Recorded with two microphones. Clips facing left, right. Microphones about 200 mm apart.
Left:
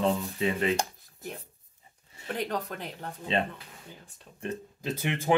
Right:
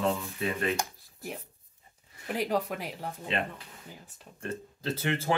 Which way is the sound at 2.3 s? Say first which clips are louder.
Right 3 dB; 5° right (ahead or behind).